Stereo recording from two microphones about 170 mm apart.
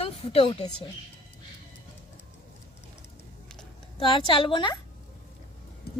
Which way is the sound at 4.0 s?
30° left (ahead or behind).